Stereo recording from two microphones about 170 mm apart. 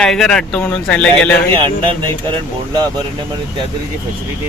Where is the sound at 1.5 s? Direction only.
30° right (ahead or behind).